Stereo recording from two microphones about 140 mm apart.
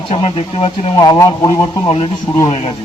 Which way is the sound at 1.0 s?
25° left (ahead or behind).